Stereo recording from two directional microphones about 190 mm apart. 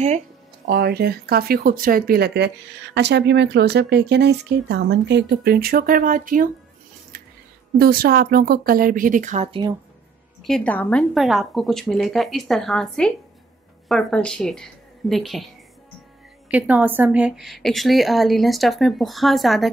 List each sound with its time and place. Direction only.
0.7 s speech: 55° right (ahead or behind)
7.7 s speech: 50° right (ahead or behind); by 9.6 s 35° right (ahead or behind)
10.4 s a woman's voice: 5° left (ahead or behind)
16.4 s a woman's voice: 5° right (ahead or behind)